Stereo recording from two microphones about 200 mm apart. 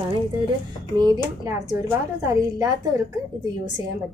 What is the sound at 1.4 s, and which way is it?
A woman's voice, 20° right (ahead or behind).